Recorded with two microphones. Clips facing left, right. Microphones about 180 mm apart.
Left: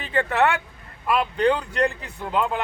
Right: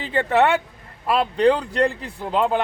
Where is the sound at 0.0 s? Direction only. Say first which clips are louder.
Right 3 dB; 30° right (ahead or behind).